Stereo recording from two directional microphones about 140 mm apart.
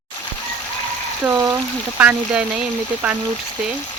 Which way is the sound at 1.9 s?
10° right (ahead or behind).